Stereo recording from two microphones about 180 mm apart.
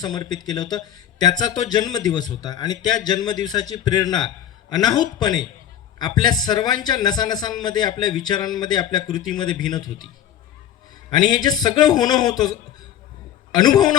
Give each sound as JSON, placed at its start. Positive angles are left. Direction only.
{"t": 0.0, "sound": "speech", "side_deg": 20}
{"t": 11.1, "sound": "speech", "side_deg": 25}